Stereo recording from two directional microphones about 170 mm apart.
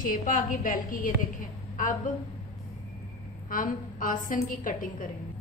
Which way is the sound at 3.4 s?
55° left (ahead or behind).